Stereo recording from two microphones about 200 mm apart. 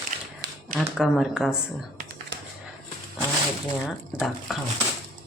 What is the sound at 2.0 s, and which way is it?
Computer keyboard, 55° right (ahead or behind).